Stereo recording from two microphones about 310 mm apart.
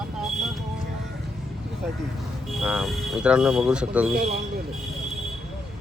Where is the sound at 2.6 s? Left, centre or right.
Centre.